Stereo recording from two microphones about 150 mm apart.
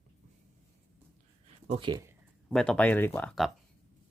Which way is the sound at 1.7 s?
30° right (ahead or behind).